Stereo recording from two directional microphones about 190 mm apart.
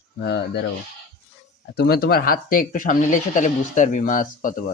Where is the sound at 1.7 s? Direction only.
55° left (ahead or behind).